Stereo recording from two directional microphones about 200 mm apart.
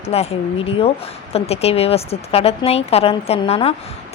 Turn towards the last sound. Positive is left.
turn(degrees=30)  # may be behind; listen again after turning